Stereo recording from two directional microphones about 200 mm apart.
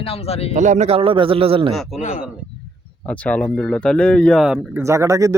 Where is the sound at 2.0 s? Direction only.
40° left (ahead or behind).